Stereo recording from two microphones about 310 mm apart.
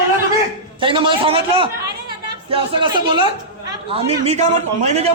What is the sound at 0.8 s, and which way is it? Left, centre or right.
A man's voice, centre.